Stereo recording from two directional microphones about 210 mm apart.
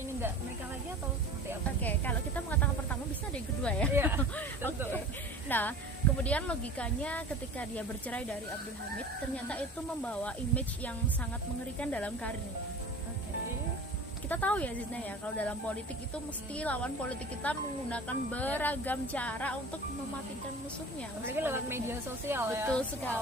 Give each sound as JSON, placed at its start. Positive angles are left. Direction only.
{"t": 1.8, "sound": "snake", "side_deg": 10}
{"t": 3.6, "sound": "speech", "side_deg": 5}
{"t": 3.9, "sound": "a sound", "side_deg": -10}
{"t": 5.5, "sound": "speech", "side_deg": 10}
{"t": 9.5, "sound": "speech", "side_deg": 5}
{"t": 14.3, "sound": "speech", "side_deg": 5}
{"t": 21.2, "sound": "a woman's voice", "side_deg": -10}
{"t": 22.7, "sound": "speech", "side_deg": 5}